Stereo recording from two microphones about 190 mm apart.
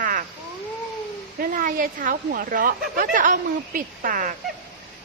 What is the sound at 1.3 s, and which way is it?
Speech, 45° right (ahead or behind).